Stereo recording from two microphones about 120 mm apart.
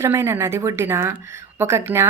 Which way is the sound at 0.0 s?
20° right (ahead or behind).